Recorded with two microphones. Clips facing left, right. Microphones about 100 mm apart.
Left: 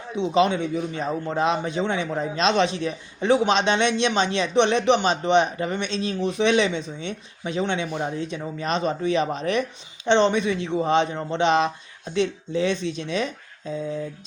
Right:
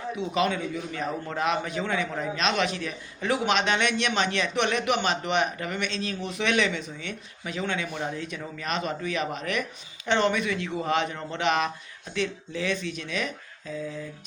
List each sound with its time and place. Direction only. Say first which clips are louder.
0.2 s a man's voice: left 7 dB; 25° left (ahead or behind)